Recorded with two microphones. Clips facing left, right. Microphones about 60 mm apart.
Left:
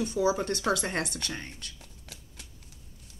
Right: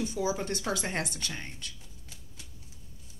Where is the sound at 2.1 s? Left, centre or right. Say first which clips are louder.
Left 4 dB; left.